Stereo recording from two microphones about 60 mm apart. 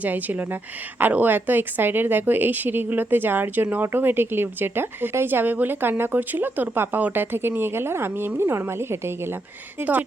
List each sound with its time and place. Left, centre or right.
0.0 s a woman's voice: right